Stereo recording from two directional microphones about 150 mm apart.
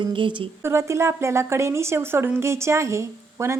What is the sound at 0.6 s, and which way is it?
A woman's voice, 20° right (ahead or behind).